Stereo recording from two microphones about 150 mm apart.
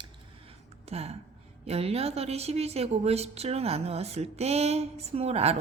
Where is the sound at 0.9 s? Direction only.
45° right (ahead or behind).